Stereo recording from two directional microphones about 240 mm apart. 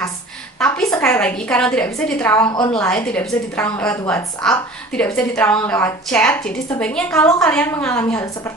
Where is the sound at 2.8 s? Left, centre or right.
Centre.